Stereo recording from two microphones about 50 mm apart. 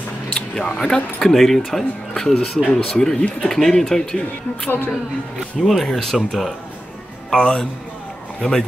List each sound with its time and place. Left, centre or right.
0.7 s speech: centre
4.6 s a woman's voice: left
5.6 s speech: centre
7.2 s a man's voice: centre